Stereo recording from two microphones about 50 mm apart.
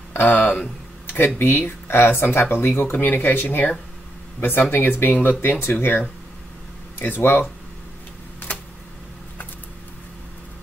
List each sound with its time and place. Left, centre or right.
0.1 s speech: left